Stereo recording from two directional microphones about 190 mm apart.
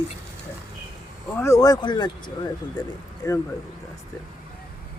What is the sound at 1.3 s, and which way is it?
Speech, 15° left (ahead or behind).